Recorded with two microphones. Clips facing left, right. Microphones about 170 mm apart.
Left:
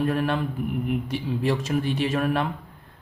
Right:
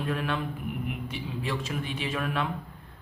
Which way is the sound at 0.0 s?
45° left (ahead or behind).